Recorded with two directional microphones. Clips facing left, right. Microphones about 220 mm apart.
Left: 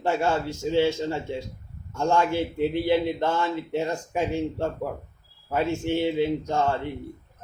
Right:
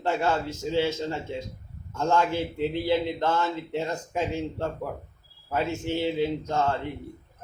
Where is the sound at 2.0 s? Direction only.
15° left (ahead or behind).